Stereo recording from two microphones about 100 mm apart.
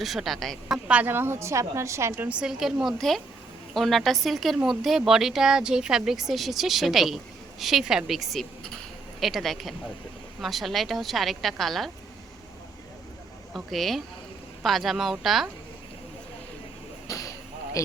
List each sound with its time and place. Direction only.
0.0 s speech: centre (ahead or behind)
0.9 s a woman's voice: 15° right (ahead or behind)
2.4 s speech: 5° right (ahead or behind)
13.5 s speech: centre (ahead or behind)
17.1 s a sound: 35° left (ahead or behind)
17.8 s speech: 35° left (ahead or behind)